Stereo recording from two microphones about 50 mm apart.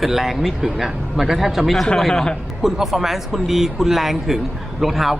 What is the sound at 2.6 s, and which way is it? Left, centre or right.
Speech, centre.